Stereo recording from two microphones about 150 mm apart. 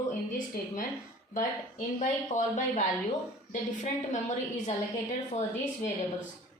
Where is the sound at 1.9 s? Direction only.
55° left (ahead or behind).